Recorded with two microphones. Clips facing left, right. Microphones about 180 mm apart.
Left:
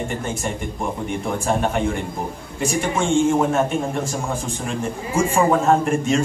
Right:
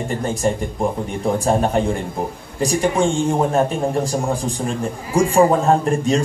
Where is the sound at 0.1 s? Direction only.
35° right (ahead or behind).